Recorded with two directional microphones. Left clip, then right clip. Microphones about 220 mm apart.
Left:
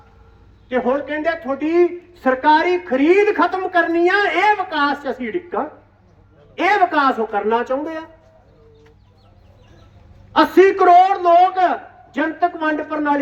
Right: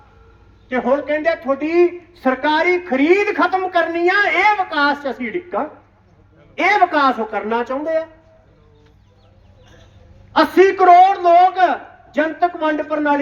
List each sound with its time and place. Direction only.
0.7 s a man's voice: 30° right (ahead or behind)
10.3 s a man's voice: 30° right (ahead or behind)